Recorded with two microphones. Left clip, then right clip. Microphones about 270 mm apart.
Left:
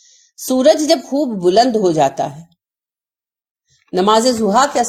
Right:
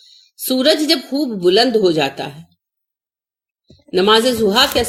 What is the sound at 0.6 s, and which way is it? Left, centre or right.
A woman's voice, left.